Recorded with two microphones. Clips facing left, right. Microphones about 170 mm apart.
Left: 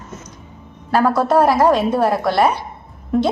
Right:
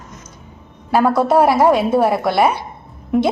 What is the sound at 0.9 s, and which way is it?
A woman's voice, 10° right (ahead or behind).